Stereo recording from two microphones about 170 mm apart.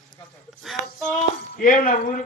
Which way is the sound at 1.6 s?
50° left (ahead or behind).